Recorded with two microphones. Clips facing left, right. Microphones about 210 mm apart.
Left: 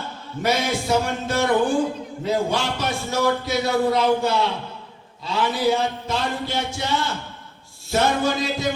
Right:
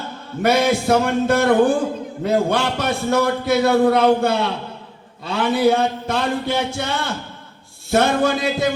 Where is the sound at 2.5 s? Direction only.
60° right (ahead or behind).